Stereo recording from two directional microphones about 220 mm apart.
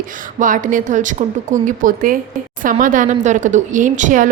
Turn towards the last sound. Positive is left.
turn(degrees=-35)  # may be behind; listen again after turning